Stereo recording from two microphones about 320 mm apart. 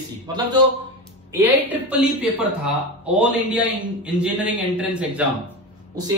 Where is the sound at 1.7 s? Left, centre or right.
Centre.